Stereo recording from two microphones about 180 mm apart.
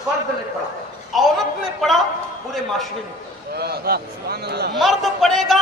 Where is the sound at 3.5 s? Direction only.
60° right (ahead or behind).